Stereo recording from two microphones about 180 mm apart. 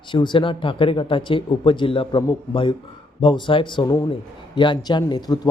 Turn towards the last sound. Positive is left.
turn(degrees=20)  # may be behind; listen again after turning